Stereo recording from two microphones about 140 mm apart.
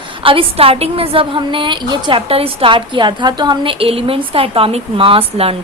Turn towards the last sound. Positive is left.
turn(degrees=-45)  # may be behind; listen again after turning